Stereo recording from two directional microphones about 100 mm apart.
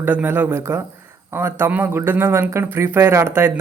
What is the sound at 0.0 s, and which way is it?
Speech, 15° right (ahead or behind).